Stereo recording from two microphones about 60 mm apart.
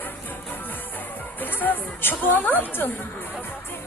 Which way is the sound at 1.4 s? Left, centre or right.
Left.